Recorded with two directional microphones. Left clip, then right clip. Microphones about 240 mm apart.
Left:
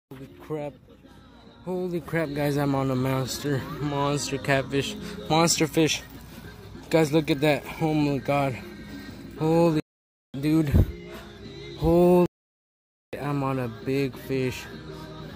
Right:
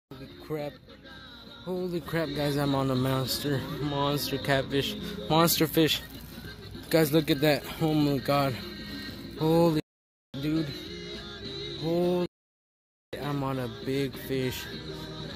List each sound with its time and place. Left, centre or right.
0.5 s speech: centre
2.0 s a man's voice: centre
9.4 s speech: centre
10.4 s a sound: left
11.0 s music: centre
11.9 s a sound: left
13.1 s a sound: centre
13.8 s a man's voice: centre
14.7 s music: centre